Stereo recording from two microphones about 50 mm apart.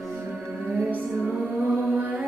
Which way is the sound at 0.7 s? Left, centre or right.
Right.